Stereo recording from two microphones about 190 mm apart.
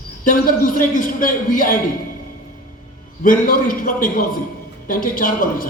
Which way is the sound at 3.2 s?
45° left (ahead or behind).